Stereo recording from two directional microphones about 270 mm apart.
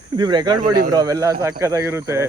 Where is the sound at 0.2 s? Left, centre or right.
Centre.